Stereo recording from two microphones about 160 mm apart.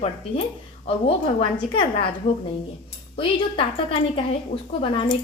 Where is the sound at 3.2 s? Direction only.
35° left (ahead or behind).